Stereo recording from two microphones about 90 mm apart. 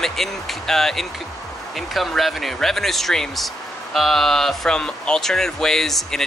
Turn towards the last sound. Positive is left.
turn(degrees=5)  # may be behind; listen again after turning